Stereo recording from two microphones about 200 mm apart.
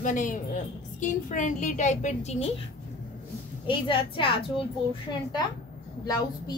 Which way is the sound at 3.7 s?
25° left (ahead or behind).